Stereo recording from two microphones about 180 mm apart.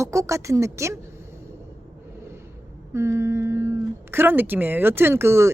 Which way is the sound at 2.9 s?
15° right (ahead or behind).